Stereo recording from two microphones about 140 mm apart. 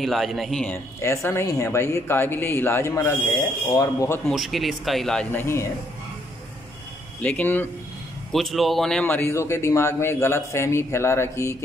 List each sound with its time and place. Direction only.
0.0 s speech: centre (ahead or behind)
0.7 s speech: 20° left (ahead or behind)
4.3 s speech: centre (ahead or behind); by 5.7 s 15° left (ahead or behind)
7.2 s speech: 10° left (ahead or behind)
8.3 s speech: centre (ahead or behind)
9.0 s speech: 15° left (ahead or behind)